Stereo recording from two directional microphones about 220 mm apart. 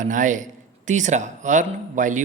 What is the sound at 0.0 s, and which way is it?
A man's voice, 35° right (ahead or behind).